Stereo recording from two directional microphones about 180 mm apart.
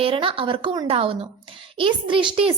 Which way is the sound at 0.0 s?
30° right (ahead or behind).